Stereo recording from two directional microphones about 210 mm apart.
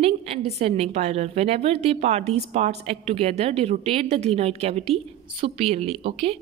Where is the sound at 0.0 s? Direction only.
30° right (ahead or behind).